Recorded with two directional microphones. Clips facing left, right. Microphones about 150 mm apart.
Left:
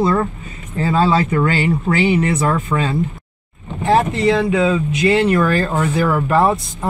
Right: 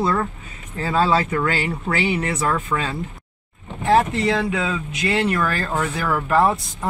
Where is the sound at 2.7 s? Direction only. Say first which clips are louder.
Left 4 dB; 20° left (ahead or behind).